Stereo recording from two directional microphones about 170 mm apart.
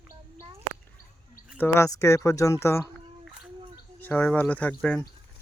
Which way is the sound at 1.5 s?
15° left (ahead or behind).